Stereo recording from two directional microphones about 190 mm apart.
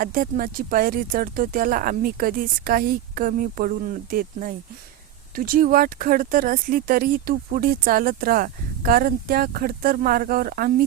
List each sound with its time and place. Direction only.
0.0 s speech: 45° right (ahead or behind)